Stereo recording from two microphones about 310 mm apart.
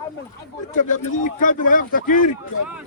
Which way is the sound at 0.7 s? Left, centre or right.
Left.